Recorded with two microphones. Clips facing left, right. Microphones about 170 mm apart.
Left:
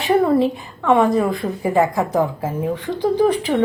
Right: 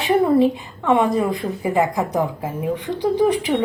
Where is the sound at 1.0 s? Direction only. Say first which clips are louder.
Left 3 dB; 20° right (ahead or behind).